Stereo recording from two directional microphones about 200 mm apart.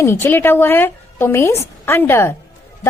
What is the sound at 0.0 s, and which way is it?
A woman's voice, 10° left (ahead or behind).